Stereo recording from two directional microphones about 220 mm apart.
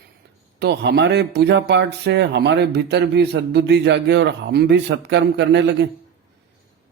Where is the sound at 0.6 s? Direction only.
50° right (ahead or behind).